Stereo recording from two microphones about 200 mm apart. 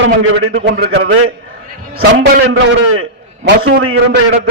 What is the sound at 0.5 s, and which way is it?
A man's voice, 55° right (ahead or behind).